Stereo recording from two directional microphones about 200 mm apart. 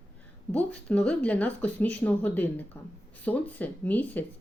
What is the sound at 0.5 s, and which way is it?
Speech, 5° left (ahead or behind).